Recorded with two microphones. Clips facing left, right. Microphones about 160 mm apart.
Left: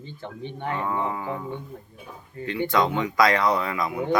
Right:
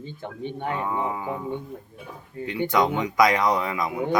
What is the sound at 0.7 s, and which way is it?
Speech, 15° right (ahead or behind).